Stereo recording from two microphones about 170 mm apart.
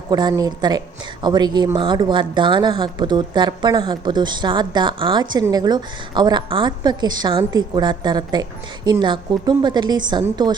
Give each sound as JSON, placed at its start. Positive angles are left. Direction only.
{"t": 0.1, "sound": "speech", "side_deg": -25}